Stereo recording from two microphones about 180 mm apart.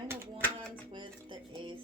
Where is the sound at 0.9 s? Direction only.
25° right (ahead or behind).